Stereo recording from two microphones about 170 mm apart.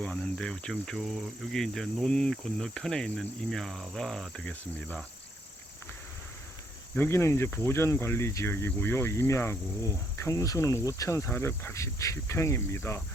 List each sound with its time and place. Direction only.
0.0 s speech: 5° left (ahead or behind)
6.9 s speech: 15° left (ahead or behind)